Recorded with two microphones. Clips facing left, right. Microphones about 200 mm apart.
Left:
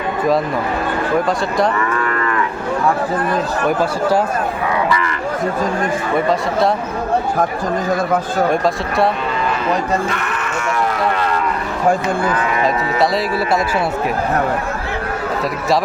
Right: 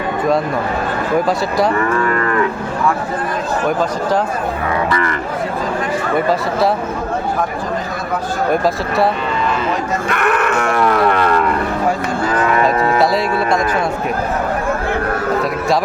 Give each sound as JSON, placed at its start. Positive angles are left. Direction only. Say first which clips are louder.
{"t": 10.1, "sound": "livestock", "louder": "right 6 dB", "side_deg": -60}
{"t": 12.7, "sound": "speech", "louder": "right 4 dB", "side_deg": -55}
{"t": 13.0, "sound": "speech", "louder": "left 1 dB", "side_deg": 0}